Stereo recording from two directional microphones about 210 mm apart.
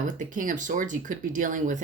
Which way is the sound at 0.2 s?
40° right (ahead or behind).